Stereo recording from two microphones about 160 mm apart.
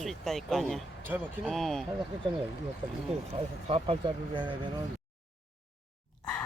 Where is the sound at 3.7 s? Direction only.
35° right (ahead or behind).